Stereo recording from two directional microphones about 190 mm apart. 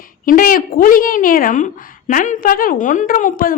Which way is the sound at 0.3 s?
45° left (ahead or behind).